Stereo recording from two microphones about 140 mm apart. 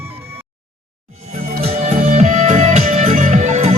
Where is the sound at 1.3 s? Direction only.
50° right (ahead or behind).